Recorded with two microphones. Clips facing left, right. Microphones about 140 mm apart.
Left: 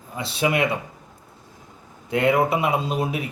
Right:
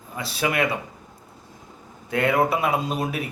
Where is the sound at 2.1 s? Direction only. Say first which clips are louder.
Left 1 dB; 20° left (ahead or behind).